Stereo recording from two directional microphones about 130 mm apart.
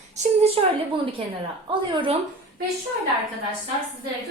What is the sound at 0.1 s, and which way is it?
Speech, 55° right (ahead or behind).